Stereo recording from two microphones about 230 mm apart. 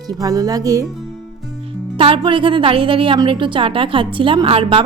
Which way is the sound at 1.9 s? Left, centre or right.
Right.